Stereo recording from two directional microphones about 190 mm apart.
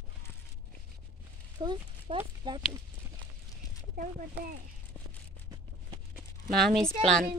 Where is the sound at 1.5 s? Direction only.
25° right (ahead or behind).